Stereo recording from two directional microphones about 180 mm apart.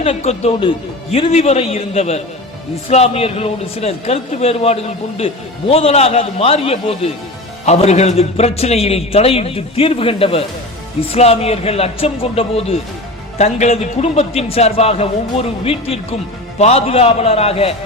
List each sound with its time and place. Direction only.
0.0 s a man's voice: 35° left (ahead or behind)